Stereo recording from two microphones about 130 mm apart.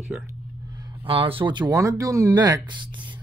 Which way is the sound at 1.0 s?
45° right (ahead or behind).